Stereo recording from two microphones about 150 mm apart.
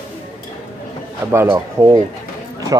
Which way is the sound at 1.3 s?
20° right (ahead or behind).